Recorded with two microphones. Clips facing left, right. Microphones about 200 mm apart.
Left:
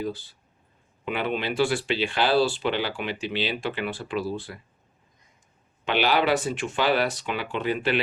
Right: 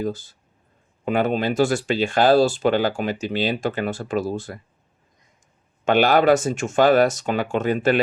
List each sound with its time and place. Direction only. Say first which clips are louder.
0.0 s speech: right 4 dB; 45° right (ahead or behind)
5.8 s speech: right 7 dB; 45° right (ahead or behind)